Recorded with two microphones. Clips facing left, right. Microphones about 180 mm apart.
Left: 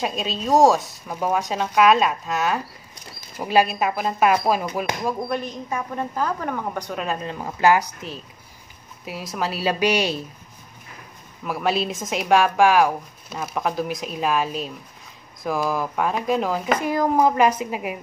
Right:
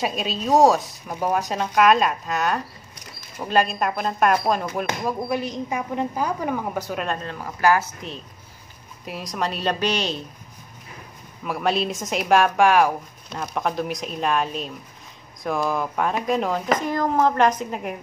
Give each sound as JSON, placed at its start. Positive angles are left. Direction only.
{"t": 0.0, "sound": "speech", "side_deg": 0}
{"t": 5.0, "sound": "a woman's voice", "side_deg": -10}
{"t": 7.2, "sound": "speech", "side_deg": 20}
{"t": 9.0, "sound": "speech", "side_deg": 0}
{"t": 11.4, "sound": "speech", "side_deg": 0}